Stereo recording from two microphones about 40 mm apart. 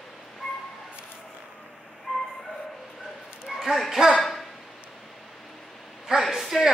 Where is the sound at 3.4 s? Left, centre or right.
Centre.